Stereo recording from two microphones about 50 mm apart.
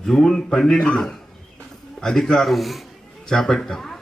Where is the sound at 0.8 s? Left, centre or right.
Left.